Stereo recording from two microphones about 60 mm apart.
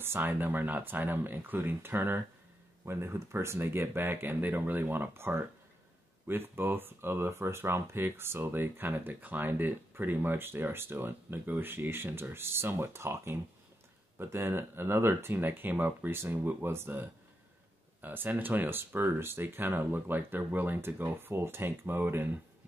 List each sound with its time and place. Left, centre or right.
0.0 s speech: right